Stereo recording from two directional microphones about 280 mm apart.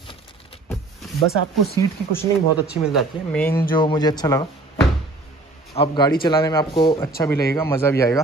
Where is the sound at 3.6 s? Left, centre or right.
Centre.